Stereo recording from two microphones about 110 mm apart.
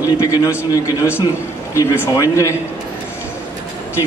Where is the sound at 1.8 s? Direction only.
30° left (ahead or behind).